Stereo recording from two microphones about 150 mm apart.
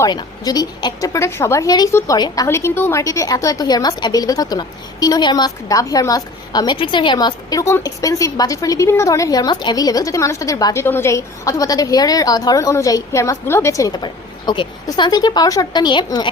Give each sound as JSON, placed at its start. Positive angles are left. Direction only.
{"t": 0.0, "sound": "a woman's voice", "side_deg": 25}